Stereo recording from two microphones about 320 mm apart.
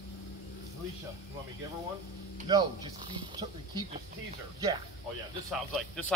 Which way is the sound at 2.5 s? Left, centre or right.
Centre.